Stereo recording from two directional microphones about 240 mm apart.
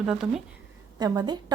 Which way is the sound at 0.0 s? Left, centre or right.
Centre.